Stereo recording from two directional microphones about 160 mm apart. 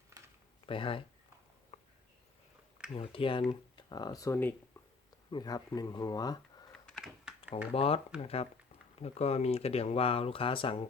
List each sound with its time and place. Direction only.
0.6 s speech: 35° left (ahead or behind)
1.7 s a sound: 45° left (ahead or behind)
2.9 s speech: 35° left (ahead or behind)
6.7 s computer keyboard: centre (ahead or behind)
7.7 s speech: 40° left (ahead or behind)